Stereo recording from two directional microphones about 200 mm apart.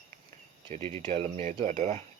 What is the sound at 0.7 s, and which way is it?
Speech, 30° right (ahead or behind).